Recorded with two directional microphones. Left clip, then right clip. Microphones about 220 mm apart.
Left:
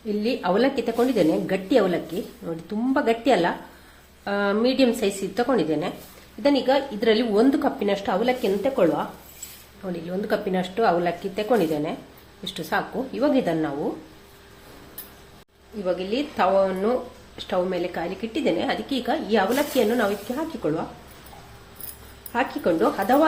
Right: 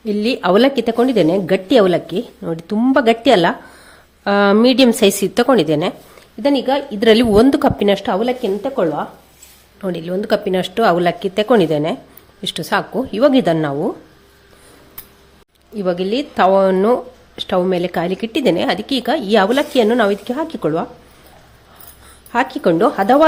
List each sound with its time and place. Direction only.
0.0 s speech: 50° right (ahead or behind); by 9.0 s 30° right (ahead or behind)
9.8 s speech: 45° right (ahead or behind)
15.8 s speech: 50° right (ahead or behind)
22.3 s speech: 50° right (ahead or behind)